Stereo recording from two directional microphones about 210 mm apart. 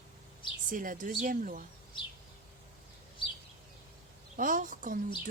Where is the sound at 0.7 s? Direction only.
40° right (ahead or behind).